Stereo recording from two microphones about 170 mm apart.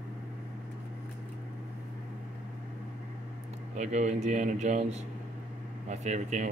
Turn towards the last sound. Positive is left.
turn(degrees=-45)  # may be behind; listen again after turning